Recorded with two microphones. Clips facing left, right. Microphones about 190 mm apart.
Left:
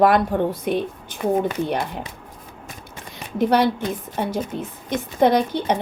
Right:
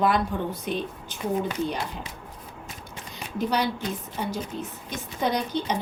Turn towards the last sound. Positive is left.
turn(degrees=55)  # may be behind; listen again after turning